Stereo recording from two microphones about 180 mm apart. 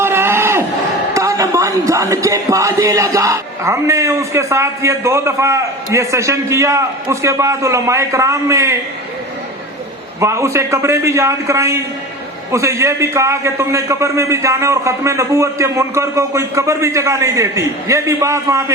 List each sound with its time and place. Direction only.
0.0 s a sound: 15° right (ahead or behind)
1.1 s speech: 15° right (ahead or behind)
10.2 s speech: 15° right (ahead or behind)